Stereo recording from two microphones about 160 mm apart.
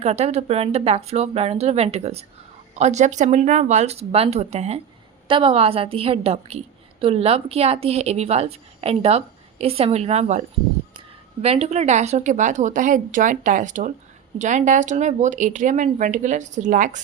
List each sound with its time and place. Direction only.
0.0 s a woman's voice: 40° right (ahead or behind)
11.4 s speech: 40° right (ahead or behind)